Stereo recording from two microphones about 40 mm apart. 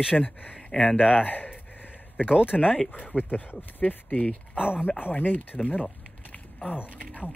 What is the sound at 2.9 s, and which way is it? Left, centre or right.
Speech, left.